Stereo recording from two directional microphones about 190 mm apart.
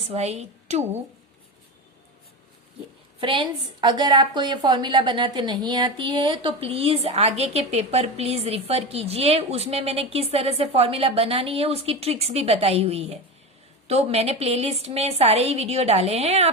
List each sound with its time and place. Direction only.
0.1 s a woman's voice: 35° right (ahead or behind)
3.2 s a woman's voice: 25° right (ahead or behind)